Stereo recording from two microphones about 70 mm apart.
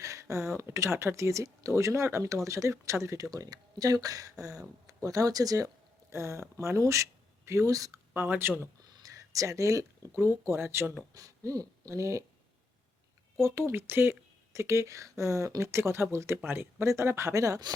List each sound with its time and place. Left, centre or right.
0.0 s speech: right
3.3 s speech: right
6.1 s speech: right
8.1 s speech: right
9.0 s speech: right
10.2 s speech: right
11.1 s speech: right
13.4 s speech: right